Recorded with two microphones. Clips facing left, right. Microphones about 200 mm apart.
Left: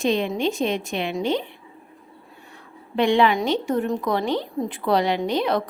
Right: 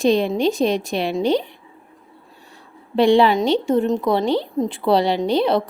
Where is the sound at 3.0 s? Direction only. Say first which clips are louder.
Right 4 dB; 35° right (ahead or behind).